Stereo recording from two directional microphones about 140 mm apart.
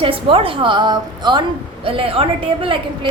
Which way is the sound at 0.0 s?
40° right (ahead or behind).